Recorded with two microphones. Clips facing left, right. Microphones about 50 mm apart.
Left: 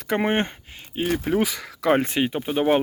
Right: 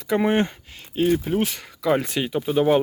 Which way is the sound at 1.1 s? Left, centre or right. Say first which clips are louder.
Even; left.